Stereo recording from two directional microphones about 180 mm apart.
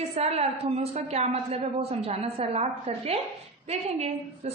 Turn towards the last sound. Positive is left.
turn(degrees=-35)  # may be behind; listen again after turning